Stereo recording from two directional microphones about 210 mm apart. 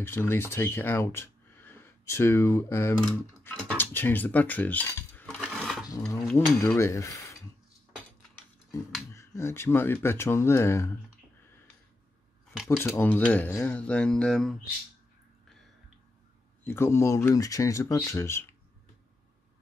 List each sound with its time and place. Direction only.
0.0 s speech: 10° left (ahead or behind)
5.4 s a sound: centre (ahead or behind)
5.9 s dishes: 15° left (ahead or behind)
6.2 s speech: 10° left (ahead or behind)
9.1 s speech: 15° left (ahead or behind)
12.6 s speech: 10° left (ahead or behind)
16.6 s speech: 10° left (ahead or behind)